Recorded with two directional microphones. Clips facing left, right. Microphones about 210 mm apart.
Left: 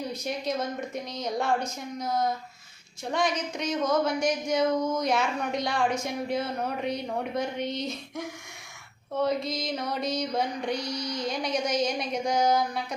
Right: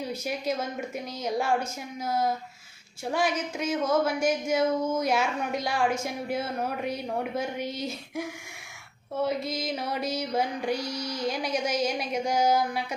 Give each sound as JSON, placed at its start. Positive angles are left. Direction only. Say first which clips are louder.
{"t": 0.3, "sound": "speech", "louder": "left 1 dB", "side_deg": -5}
{"t": 10.8, "sound": "a sound", "louder": "even", "side_deg": -25}
{"t": 11.1, "sound": "speech", "louder": "right 1 dB", "side_deg": -5}